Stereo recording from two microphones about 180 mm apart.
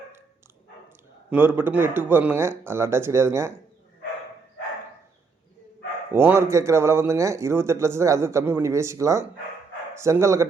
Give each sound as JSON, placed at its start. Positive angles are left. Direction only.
{"t": 1.3, "sound": "speech", "side_deg": -10}
{"t": 6.1, "sound": "speech", "side_deg": -15}